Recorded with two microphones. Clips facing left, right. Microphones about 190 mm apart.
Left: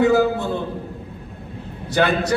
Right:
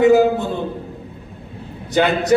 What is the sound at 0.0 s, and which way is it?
Speech, 20° right (ahead or behind).